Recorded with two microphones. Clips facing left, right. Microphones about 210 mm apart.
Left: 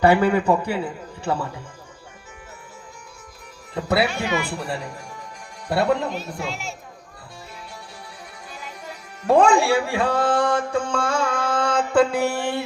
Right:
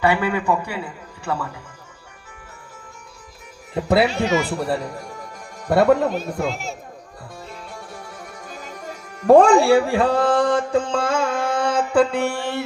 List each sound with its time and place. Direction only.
0.0 s a man's voice: 40° left (ahead or behind)
3.8 s speech: 30° right (ahead or behind); by 6.5 s 55° right (ahead or behind)
7.5 s music: 50° right (ahead or behind); by 11.9 s 15° right (ahead or behind)
11.9 s a sound: 5° left (ahead or behind)